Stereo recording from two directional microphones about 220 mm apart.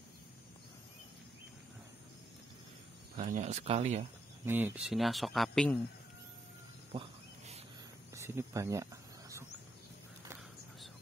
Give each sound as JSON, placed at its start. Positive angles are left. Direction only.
{"t": 3.2, "sound": "speech", "side_deg": -35}
{"t": 4.5, "sound": "speech", "side_deg": -10}
{"t": 6.9, "sound": "wild animals", "side_deg": -25}
{"t": 8.1, "sound": "speech", "side_deg": -10}